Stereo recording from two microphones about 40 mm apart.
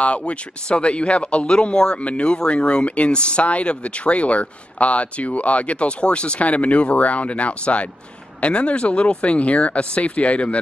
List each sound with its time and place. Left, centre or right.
0.0 s speech: left
2.0 s speech: left